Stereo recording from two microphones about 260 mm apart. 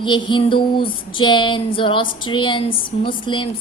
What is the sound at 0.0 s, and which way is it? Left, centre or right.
A woman's voice, centre.